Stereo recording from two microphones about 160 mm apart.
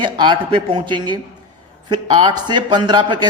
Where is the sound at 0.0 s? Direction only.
30° right (ahead or behind).